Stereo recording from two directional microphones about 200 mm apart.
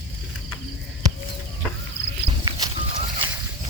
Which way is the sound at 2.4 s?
20° right (ahead or behind).